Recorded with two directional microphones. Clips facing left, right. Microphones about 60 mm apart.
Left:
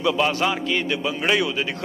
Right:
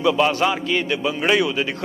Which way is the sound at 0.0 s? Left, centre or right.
Right.